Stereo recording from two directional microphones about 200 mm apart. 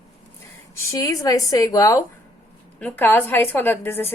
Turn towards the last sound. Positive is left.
turn(degrees=10)  # may be behind; listen again after turning